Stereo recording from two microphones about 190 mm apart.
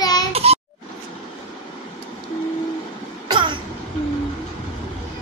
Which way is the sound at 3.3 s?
25° right (ahead or behind).